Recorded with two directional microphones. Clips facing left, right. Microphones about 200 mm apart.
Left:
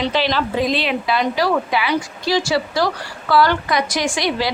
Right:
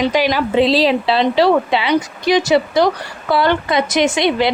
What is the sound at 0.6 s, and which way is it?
Speech, 35° right (ahead or behind).